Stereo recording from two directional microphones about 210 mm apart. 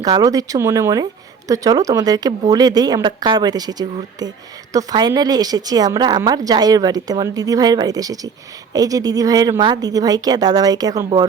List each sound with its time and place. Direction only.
0.0 s speech: 15° right (ahead or behind)